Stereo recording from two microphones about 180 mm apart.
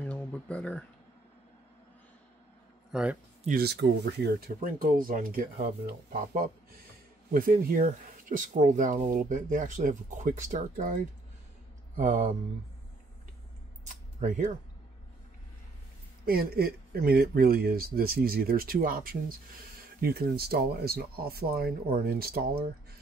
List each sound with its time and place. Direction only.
0.0 s a sound: 10° left (ahead or behind)
2.9 s a man's voice: 5° right (ahead or behind)
3.4 s speech: 60° right (ahead or behind)
7.3 s speech: 50° right (ahead or behind)
12.0 s speech: 50° right (ahead or behind)
13.8 s a sound: 45° right (ahead or behind)
16.3 s speech: 55° right (ahead or behind)